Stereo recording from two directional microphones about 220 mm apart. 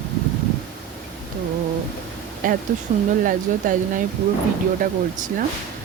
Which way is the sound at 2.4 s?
40° right (ahead or behind).